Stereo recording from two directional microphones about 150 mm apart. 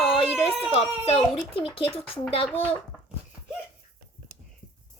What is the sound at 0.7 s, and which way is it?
A child's voice, 40° left (ahead or behind).